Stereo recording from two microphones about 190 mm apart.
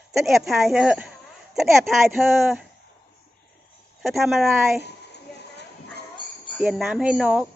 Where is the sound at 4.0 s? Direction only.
Centre (ahead or behind).